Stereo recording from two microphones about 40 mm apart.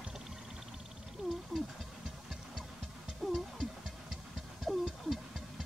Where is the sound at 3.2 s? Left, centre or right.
Centre.